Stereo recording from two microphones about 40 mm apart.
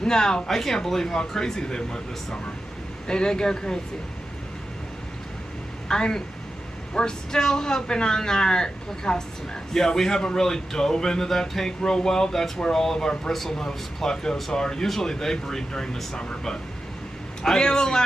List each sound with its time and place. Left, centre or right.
0.0 s speech: centre
3.1 s speech: left
5.9 s a man's voice: centre